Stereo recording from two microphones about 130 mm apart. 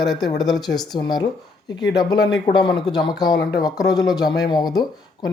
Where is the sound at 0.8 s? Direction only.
30° left (ahead or behind).